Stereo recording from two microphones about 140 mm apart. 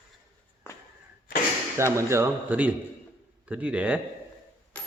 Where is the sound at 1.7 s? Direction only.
20° right (ahead or behind).